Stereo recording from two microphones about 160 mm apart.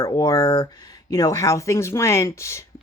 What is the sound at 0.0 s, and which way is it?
Speech, 20° left (ahead or behind).